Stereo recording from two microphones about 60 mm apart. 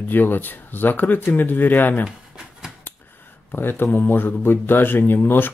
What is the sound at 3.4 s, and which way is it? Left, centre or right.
Speech, left.